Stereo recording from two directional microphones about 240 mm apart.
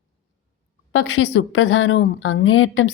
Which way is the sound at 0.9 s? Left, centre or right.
Left.